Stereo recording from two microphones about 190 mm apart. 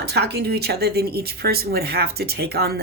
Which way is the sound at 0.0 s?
60° right (ahead or behind).